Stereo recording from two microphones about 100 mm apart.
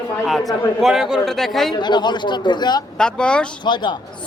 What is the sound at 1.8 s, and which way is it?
A man's voice, 50° left (ahead or behind).